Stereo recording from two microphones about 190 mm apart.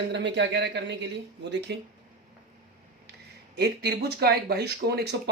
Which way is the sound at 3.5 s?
60° right (ahead or behind).